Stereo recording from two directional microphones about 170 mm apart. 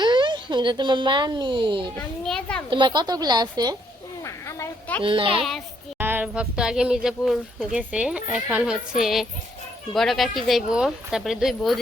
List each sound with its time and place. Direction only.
0.0 s speech: 25° right (ahead or behind)
2.0 s speech: 5° left (ahead or behind)
2.6 s a woman's voice: 30° right (ahead or behind)
4.2 s a sound: 15° left (ahead or behind)
5.0 s a child's voice: 30° right (ahead or behind)
5.4 s speech: centre (ahead or behind)
6.0 s speech: 10° right (ahead or behind)